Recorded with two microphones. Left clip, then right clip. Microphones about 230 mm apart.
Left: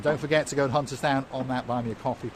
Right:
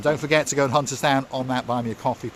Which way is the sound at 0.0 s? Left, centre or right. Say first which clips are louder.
Right 4 dB; right.